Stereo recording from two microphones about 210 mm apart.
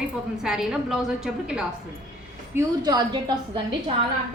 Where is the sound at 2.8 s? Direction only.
20° right (ahead or behind).